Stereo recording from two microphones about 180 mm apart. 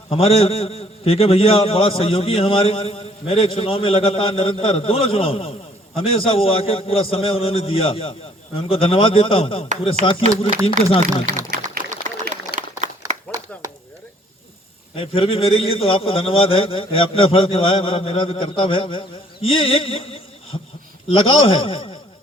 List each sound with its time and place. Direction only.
0.1 s a man's voice: 35° left (ahead or behind)
11.3 s a sound: 45° right (ahead or behind)
14.9 s a man's voice: 30° left (ahead or behind)